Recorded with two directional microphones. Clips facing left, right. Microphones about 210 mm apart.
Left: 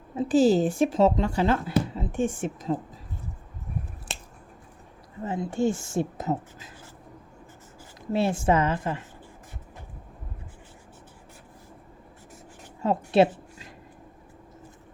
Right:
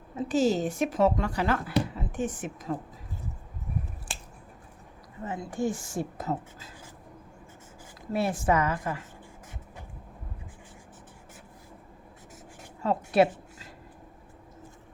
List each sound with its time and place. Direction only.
0.2 s a woman's voice: 30° left (ahead or behind)
5.2 s a woman's voice: 25° left (ahead or behind)
8.1 s a woman's voice: 25° left (ahead or behind)
12.8 s a woman's voice: 25° left (ahead or behind)